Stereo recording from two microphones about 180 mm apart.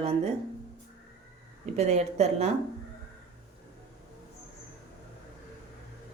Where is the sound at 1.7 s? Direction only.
40° right (ahead or behind).